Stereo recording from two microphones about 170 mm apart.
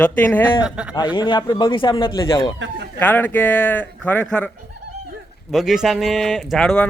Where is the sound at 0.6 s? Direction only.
5° right (ahead or behind).